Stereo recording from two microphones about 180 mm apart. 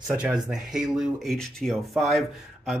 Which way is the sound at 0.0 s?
5° right (ahead or behind).